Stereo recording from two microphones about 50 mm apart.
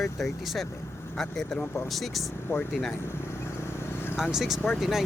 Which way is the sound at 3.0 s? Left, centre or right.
Left.